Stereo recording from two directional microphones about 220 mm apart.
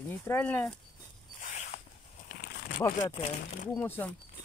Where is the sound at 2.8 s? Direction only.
10° left (ahead or behind).